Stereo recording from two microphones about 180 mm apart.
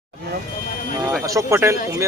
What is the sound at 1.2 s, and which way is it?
Speech, 15° right (ahead or behind).